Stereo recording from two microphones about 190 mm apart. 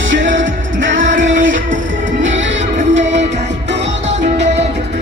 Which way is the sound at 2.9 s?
70° right (ahead or behind).